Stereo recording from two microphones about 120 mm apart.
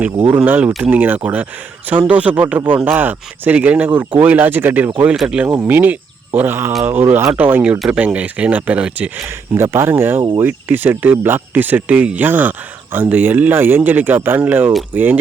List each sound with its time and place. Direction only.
0.3 s speech: 15° right (ahead or behind)
5.0 s speech: 5° right (ahead or behind)